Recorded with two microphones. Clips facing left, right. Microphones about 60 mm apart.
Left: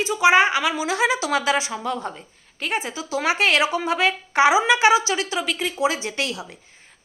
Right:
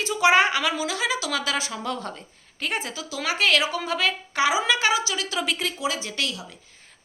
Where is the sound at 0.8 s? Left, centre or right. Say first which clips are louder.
Left 5 dB; left; by 2.9 s centre.